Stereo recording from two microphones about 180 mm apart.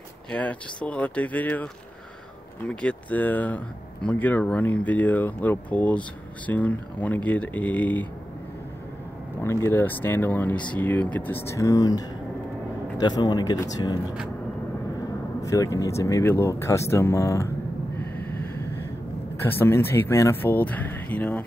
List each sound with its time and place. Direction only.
0.3 s speech: 5° left (ahead or behind)
9.4 s speech: 15° left (ahead or behind)
13.0 s speech: 25° left (ahead or behind)
15.4 s speech: 20° left (ahead or behind)
18.1 s a sound: 10° left (ahead or behind)
19.4 s speech: 15° left (ahead or behind)